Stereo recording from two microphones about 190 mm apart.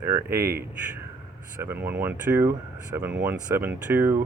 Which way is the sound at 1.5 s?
10° right (ahead or behind).